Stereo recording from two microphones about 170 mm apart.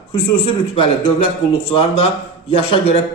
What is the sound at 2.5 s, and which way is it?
Speech, 35° left (ahead or behind).